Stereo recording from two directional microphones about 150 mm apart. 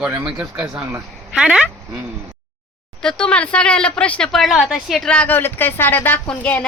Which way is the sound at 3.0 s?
5° left (ahead or behind).